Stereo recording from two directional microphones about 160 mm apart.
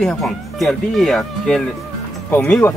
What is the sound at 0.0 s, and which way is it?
A woman's voice, 5° left (ahead or behind).